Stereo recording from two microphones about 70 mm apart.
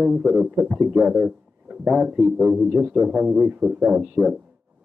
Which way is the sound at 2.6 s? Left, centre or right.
Centre.